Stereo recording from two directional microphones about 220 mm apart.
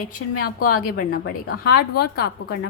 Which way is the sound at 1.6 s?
45° left (ahead or behind).